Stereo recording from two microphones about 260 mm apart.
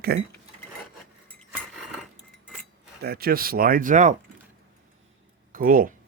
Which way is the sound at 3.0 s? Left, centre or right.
Right.